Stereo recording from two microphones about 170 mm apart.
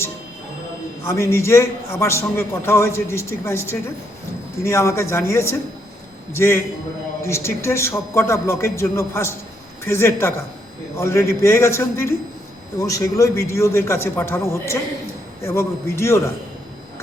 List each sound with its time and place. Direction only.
1.0 s a man's voice: 15° left (ahead or behind)